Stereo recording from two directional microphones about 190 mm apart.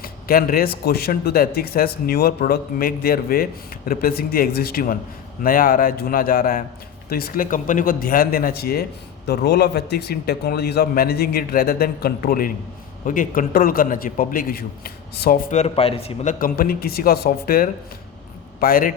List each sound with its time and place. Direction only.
0.0 s speech: 50° left (ahead or behind)
15.4 s a man's voice: 35° left (ahead or behind)
16.4 s speech: 55° left (ahead or behind)